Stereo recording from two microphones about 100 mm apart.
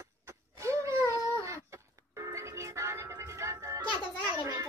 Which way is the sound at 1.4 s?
30° right (ahead or behind).